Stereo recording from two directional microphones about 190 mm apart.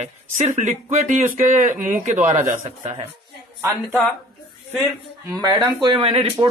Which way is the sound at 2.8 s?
30° right (ahead or behind).